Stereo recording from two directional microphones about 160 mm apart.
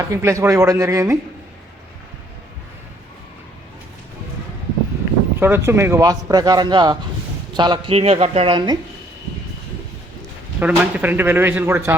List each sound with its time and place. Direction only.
0.0 s a man's voice: 20° right (ahead or behind)
5.4 s a man's voice: 15° right (ahead or behind)
10.6 s speech: 10° right (ahead or behind)